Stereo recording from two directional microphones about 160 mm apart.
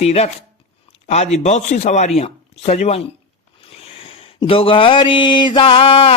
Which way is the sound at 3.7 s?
35° left (ahead or behind).